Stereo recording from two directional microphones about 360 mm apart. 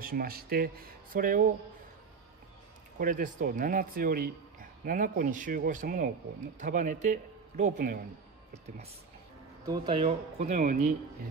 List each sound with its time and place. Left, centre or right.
0.0 s speech: right
3.0 s speech: right
9.7 s speech: centre